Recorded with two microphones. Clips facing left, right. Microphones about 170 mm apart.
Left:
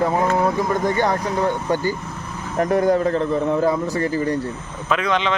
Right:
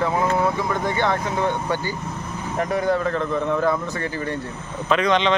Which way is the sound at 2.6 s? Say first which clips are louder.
Left 4 dB; 45° left (ahead or behind).